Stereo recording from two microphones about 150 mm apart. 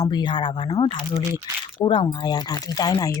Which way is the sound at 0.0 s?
30° left (ahead or behind).